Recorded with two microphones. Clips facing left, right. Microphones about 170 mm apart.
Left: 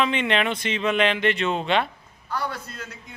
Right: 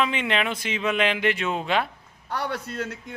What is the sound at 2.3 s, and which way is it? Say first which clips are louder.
Speech: right 1 dB; 80° right.